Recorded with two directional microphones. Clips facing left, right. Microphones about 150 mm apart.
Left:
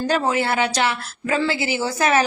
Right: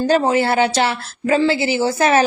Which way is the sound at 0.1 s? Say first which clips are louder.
Right 5 dB; 30° right (ahead or behind).